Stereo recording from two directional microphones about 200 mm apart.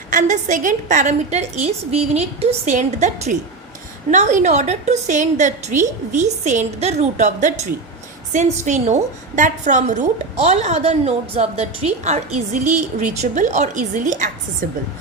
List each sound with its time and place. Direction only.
0.1 s a woman's voice: 40° right (ahead or behind)